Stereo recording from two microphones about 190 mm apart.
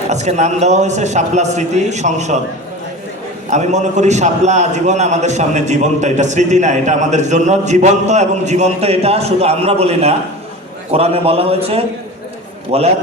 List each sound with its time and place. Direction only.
0.1 s a man's voice: 35° right (ahead or behind)
3.5 s a man's voice: 40° right (ahead or behind)